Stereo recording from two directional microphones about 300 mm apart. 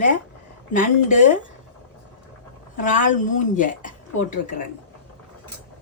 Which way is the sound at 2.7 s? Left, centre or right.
Left.